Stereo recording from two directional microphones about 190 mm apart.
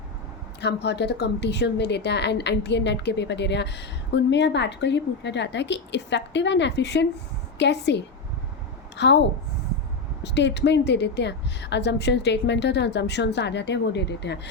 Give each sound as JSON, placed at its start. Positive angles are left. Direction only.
{"t": 0.6, "sound": "a woman's voice", "side_deg": 60}
{"t": 10.2, "sound": "a woman's voice", "side_deg": 65}